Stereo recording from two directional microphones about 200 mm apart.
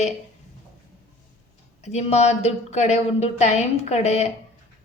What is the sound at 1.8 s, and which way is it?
A woman's voice, 35° left (ahead or behind).